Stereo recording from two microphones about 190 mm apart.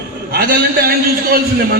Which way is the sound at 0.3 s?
50° right (ahead or behind).